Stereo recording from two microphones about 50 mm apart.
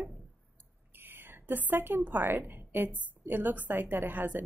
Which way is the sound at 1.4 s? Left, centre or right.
Right.